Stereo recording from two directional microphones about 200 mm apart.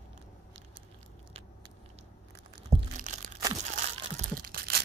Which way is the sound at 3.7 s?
45° right (ahead or behind).